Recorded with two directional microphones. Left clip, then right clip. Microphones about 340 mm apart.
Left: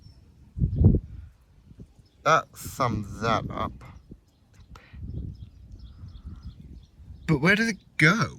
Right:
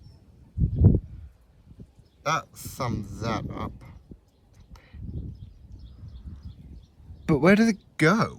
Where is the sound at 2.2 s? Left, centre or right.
Centre.